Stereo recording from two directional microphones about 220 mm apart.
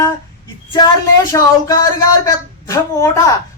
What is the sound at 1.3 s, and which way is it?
Speech, 15° left (ahead or behind).